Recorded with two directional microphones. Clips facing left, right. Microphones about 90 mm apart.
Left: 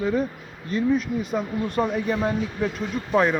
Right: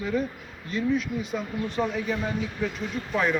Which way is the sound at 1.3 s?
50° left (ahead or behind).